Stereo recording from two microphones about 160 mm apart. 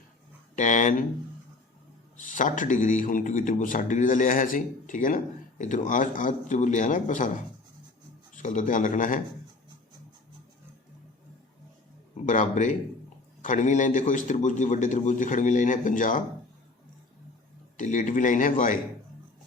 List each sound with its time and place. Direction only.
0.5 s a man's voice: 50° left (ahead or behind)
2.2 s a man's voice: 55° left (ahead or behind)
8.4 s a man's voice: 50° left (ahead or behind)
12.1 s a man's voice: 50° left (ahead or behind)
17.7 s a man's voice: 50° left (ahead or behind)